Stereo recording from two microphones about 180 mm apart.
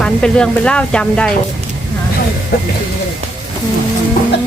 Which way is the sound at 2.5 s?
60° left (ahead or behind).